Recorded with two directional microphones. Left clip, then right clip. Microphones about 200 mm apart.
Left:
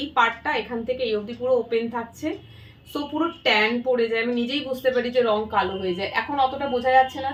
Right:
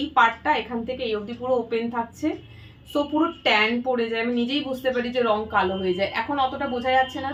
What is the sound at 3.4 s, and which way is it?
A woman's voice, centre (ahead or behind).